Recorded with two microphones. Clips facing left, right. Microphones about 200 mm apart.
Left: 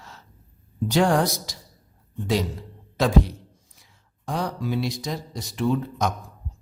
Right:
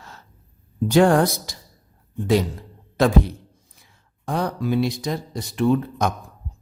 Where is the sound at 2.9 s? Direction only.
55° right (ahead or behind).